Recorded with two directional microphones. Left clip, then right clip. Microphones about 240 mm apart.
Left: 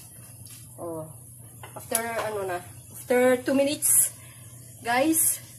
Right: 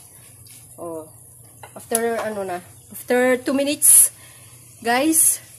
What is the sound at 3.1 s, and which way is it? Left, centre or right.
Speech, right.